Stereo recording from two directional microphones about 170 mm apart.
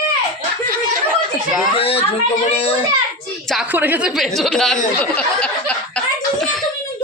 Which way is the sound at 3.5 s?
10° right (ahead or behind).